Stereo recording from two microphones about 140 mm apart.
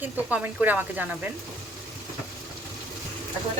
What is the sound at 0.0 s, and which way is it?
Speech, 10° right (ahead or behind).